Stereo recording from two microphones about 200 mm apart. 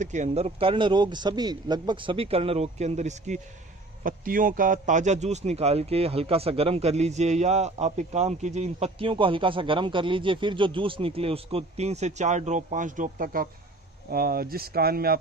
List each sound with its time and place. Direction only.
0.0 s speech: 35° right (ahead or behind)